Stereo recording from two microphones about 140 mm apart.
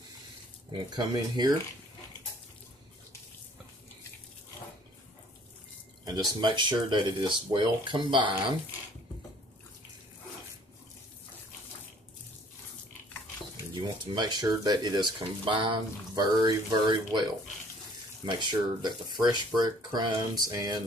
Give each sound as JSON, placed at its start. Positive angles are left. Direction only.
{"t": 0.7, "sound": "speech", "side_deg": -30}
{"t": 6.0, "sound": "speech", "side_deg": -30}
{"t": 13.7, "sound": "speech", "side_deg": -30}
{"t": 18.2, "sound": "speech", "side_deg": -30}